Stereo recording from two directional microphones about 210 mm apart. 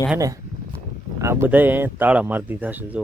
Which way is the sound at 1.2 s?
15° right (ahead or behind).